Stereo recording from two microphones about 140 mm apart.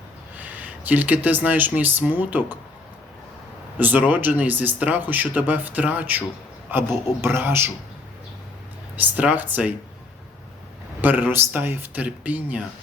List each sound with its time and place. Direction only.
0.3 s speech: 10° right (ahead or behind)
3.8 s speech: 10° right (ahead or behind)
9.0 s speech: 10° right (ahead or behind)
11.0 s speech: 15° right (ahead or behind)